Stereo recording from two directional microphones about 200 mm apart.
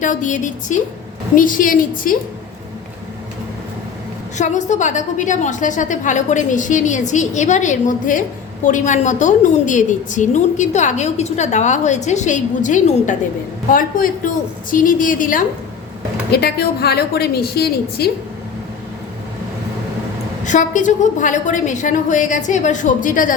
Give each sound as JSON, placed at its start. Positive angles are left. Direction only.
{"t": 0.0, "sound": "a woman's voice", "side_deg": 40}
{"t": 4.4, "sound": "a woman's voice", "side_deg": 35}
{"t": 16.3, "sound": "a woman's voice", "side_deg": 50}
{"t": 20.4, "sound": "a woman's voice", "side_deg": 40}